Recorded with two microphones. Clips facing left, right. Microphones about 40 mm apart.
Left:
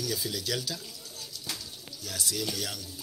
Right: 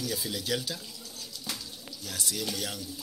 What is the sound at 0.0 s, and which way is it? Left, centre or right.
Speech, centre.